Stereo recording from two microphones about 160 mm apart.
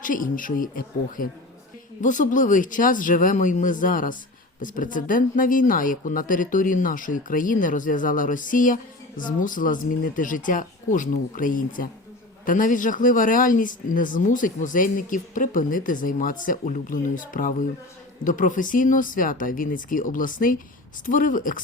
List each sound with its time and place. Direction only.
0.0 s speech: 55° left (ahead or behind)